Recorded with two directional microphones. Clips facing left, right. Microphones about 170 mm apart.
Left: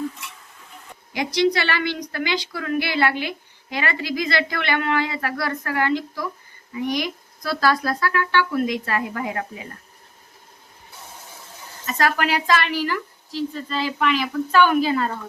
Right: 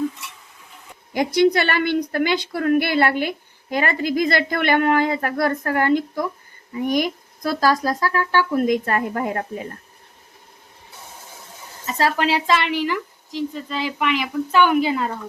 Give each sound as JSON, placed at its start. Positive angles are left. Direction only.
{"t": 1.1, "sound": "a woman's voice", "side_deg": -50}
{"t": 11.9, "sound": "speech", "side_deg": -25}